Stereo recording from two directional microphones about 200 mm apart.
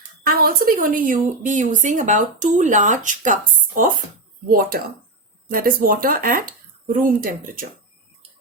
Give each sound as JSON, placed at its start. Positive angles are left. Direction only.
{"t": 0.3, "sound": "a woman's voice", "side_deg": -45}
{"t": 4.4, "sound": "speech", "side_deg": -45}